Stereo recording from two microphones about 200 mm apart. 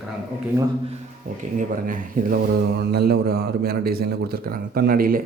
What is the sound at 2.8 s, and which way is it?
A man's voice, 50° right (ahead or behind).